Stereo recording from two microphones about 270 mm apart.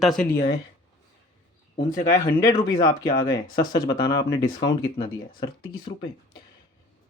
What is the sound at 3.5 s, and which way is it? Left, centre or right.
Speech, centre.